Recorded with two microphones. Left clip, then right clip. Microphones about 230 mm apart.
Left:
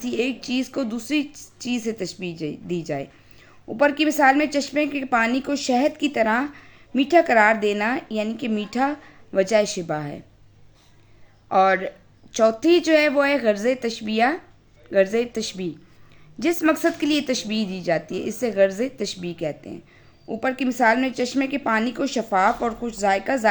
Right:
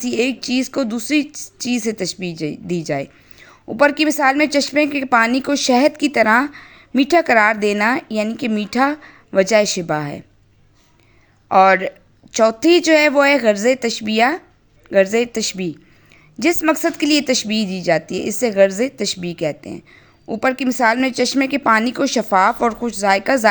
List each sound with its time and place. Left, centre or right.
0.0 s a woman's voice: right
11.4 s a woman's voice: right